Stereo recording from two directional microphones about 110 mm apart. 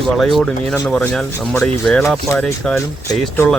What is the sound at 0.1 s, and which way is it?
Speech, centre (ahead or behind).